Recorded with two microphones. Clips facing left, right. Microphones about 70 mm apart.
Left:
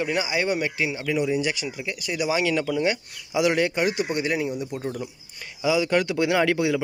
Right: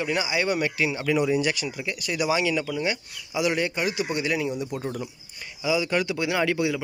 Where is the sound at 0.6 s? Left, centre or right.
Centre.